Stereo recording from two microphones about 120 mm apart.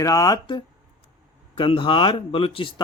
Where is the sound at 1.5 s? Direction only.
45° left (ahead or behind).